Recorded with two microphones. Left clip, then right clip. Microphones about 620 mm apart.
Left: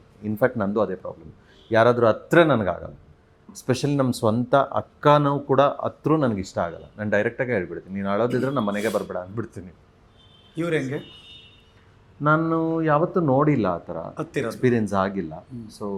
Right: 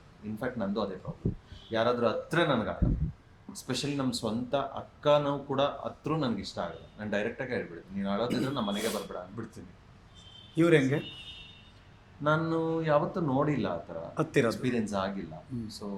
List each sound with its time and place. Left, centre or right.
0.3 s speech: left
8.3 s speech: centre
10.5 s speech: centre
12.2 s speech: left
14.2 s speech: centre
14.5 s speech: left